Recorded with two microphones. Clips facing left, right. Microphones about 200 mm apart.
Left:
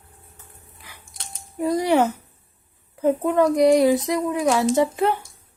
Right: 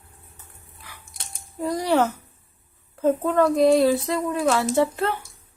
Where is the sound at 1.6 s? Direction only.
20° left (ahead or behind).